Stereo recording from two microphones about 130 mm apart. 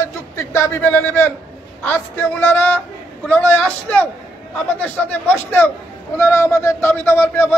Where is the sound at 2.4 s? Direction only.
15° left (ahead or behind).